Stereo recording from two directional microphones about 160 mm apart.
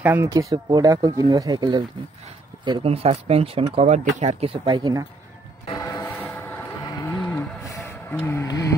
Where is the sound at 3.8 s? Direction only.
50° right (ahead or behind); by 5.0 s 25° right (ahead or behind).